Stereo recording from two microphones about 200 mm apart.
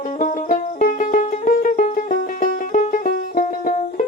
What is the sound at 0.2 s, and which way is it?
Music, 40° left (ahead or behind).